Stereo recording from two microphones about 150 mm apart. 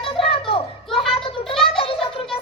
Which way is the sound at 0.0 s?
35° left (ahead or behind).